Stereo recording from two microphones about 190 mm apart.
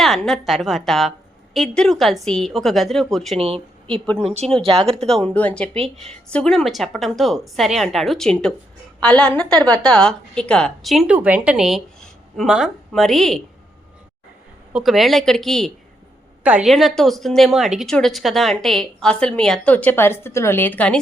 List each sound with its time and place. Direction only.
0.0 s a woman's voice: centre (ahead or behind)
3.3 s speech: 30° right (ahead or behind)
5.0 s a woman's voice: 5° left (ahead or behind)
14.7 s a woman's voice: centre (ahead or behind)